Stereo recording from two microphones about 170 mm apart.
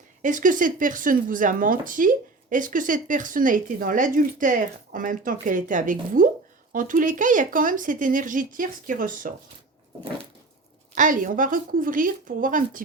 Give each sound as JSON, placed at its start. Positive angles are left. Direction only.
{"t": 0.2, "sound": "speech", "side_deg": -50}
{"t": 10.9, "sound": "speech", "side_deg": -50}